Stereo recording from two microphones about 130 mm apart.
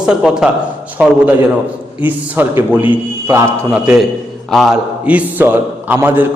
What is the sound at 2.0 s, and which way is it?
A man's voice, 15° right (ahead or behind).